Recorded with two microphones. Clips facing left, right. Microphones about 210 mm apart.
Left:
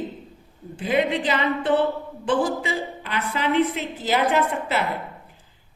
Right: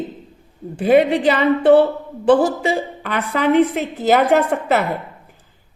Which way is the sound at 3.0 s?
50° right (ahead or behind).